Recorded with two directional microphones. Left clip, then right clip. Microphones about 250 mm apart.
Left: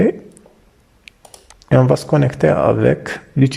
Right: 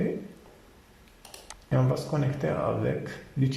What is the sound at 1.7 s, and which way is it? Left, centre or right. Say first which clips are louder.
Speech: left 15 dB; left.